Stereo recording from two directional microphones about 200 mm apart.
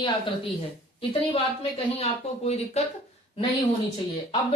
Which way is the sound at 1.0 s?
30° left (ahead or behind).